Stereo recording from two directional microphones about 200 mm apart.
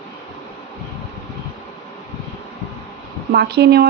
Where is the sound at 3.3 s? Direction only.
55° right (ahead or behind).